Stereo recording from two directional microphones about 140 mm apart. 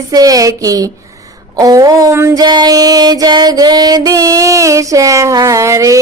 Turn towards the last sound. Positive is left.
turn(degrees=-20)  # may be behind; listen again after turning